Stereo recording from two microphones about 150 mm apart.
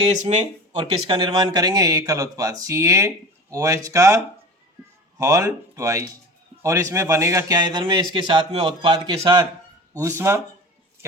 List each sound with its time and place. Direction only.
0.2 s speech: 50° right (ahead or behind)
0.7 s speech: 35° right (ahead or behind)
10.0 s speech: 20° right (ahead or behind)